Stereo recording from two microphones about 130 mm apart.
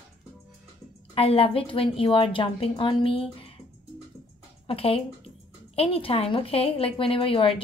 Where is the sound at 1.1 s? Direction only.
45° left (ahead or behind).